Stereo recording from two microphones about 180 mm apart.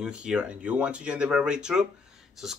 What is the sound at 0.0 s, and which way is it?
Speech, 5° right (ahead or behind).